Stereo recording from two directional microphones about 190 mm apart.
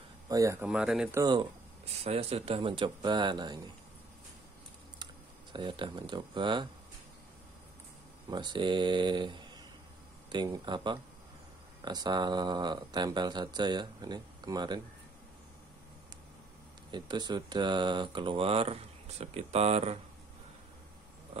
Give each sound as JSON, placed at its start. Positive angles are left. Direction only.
{"t": 0.3, "sound": "speech", "side_deg": -15}
{"t": 0.7, "sound": "speech", "side_deg": -5}
{"t": 1.1, "sound": "speech", "side_deg": -20}
{"t": 2.0, "sound": "speech", "side_deg": -30}
{"t": 4.9, "sound": "speech", "side_deg": -25}
{"t": 8.3, "sound": "speech", "side_deg": -25}
{"t": 16.9, "sound": "speech", "side_deg": -25}